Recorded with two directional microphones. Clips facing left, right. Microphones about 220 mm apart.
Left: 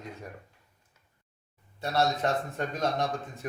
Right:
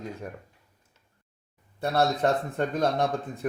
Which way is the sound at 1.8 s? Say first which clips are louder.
Right 3 dB; 55° right (ahead or behind).